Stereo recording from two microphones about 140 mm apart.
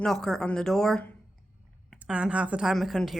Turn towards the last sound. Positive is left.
turn(degrees=0)  # may be behind; listen again after turning